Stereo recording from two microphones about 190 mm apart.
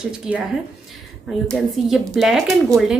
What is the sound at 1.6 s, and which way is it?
Speech, centre (ahead or behind).